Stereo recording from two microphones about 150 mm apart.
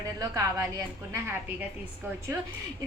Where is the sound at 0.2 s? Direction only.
25° right (ahead or behind).